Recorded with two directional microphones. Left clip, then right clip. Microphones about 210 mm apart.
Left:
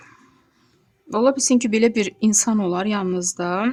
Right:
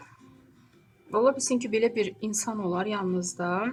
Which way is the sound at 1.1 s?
50° left (ahead or behind).